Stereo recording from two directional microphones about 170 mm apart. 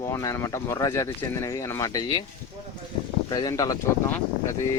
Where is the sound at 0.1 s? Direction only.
20° left (ahead or behind).